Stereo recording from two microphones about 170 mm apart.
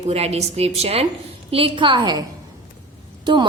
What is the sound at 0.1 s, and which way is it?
A woman's voice, 40° right (ahead or behind).